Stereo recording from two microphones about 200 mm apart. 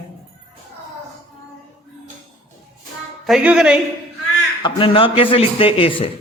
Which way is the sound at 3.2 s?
5° right (ahead or behind).